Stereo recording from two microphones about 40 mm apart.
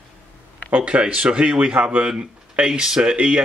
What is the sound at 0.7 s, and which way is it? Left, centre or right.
Speech, right.